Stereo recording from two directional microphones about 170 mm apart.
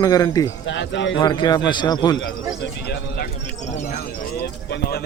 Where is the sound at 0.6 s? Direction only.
90° left.